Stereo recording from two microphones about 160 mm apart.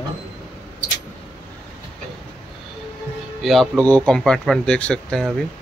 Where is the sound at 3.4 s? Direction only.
Centre (ahead or behind).